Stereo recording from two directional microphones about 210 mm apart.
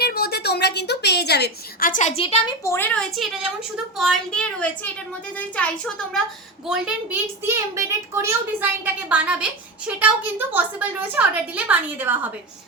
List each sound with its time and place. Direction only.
0.0 s a woman's voice: 50° left (ahead or behind); by 2.7 s 20° left (ahead or behind)
2.7 s a woman's voice: 5° left (ahead or behind); by 12.3 s 10° right (ahead or behind)